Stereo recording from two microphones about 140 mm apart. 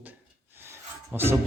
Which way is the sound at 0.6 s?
15° right (ahead or behind).